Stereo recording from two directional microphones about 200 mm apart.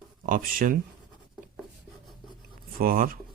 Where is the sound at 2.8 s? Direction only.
45° right (ahead or behind).